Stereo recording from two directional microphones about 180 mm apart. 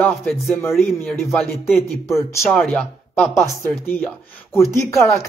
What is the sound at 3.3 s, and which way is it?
Speech, 15° left (ahead or behind).